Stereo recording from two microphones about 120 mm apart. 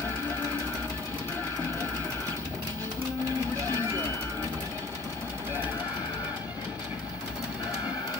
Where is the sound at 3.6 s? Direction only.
30° right (ahead or behind).